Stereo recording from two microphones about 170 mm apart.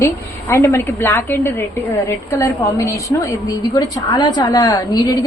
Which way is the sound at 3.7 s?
25° left (ahead or behind).